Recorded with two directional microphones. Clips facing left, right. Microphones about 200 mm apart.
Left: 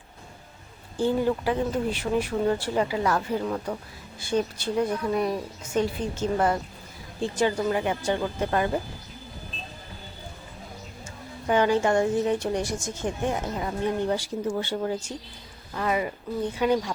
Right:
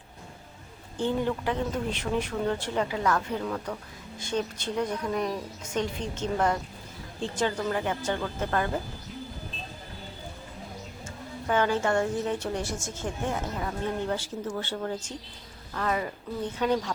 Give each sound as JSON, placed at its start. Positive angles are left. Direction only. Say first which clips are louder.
{"t": 0.9, "sound": "a woman's voice", "louder": "left 4 dB", "side_deg": 10}
{"t": 11.4, "sound": "a woman's voice", "louder": "left 4 dB", "side_deg": 15}